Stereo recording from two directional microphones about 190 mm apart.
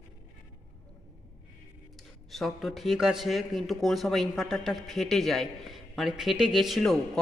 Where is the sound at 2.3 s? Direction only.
Centre (ahead or behind).